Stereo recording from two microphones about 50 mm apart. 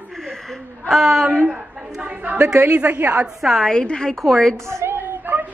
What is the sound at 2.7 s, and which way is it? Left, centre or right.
Speech, right.